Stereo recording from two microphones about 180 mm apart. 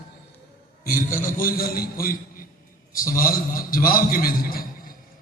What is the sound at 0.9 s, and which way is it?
A man's voice, 50° left (ahead or behind).